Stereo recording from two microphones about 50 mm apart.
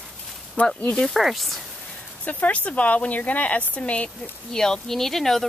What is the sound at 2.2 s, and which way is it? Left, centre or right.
Speech, left.